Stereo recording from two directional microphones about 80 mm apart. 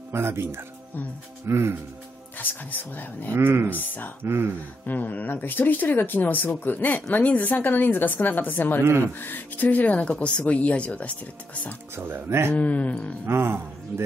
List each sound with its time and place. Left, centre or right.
0.1 s speech: right
2.3 s speech: left
3.3 s speech: right
3.7 s speech: left
4.2 s speech: right
4.8 s speech: left
12.0 s speech: right
12.5 s speech: centre
13.3 s speech: right